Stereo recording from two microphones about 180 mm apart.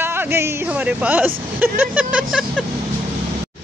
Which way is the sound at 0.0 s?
10° right (ahead or behind).